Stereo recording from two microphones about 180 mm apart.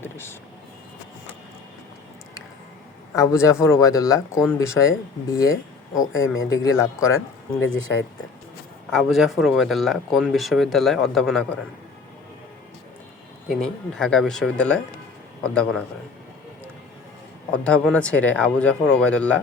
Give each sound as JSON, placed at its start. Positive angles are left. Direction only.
{"t": 0.0, "sound": "vehicle", "side_deg": 15}
{"t": 3.2, "sound": "speech", "side_deg": 15}
{"t": 8.9, "sound": "speech", "side_deg": 0}
{"t": 13.6, "sound": "speech", "side_deg": 5}
{"t": 17.5, "sound": "speech", "side_deg": 5}